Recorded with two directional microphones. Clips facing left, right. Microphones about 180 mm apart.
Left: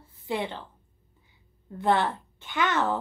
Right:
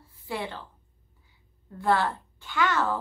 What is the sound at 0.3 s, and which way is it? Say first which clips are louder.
Speech: left 3 dB; 20° left (ahead or behind).